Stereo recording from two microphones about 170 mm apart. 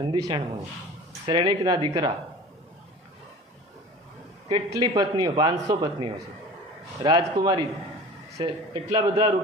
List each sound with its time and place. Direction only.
0.0 s a man's voice: 25° right (ahead or behind)
4.4 s a man's voice: 25° right (ahead or behind)